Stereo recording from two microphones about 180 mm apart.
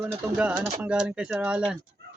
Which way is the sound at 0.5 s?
25° right (ahead or behind).